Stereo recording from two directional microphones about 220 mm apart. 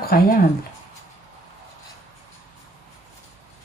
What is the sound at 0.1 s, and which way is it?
Speech, 45° left (ahead or behind).